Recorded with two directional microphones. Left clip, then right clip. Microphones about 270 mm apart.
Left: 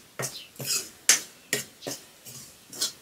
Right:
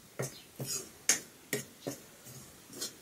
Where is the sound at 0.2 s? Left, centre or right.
Centre.